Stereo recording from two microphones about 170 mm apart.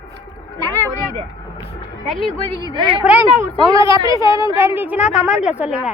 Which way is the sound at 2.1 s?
30° left (ahead or behind).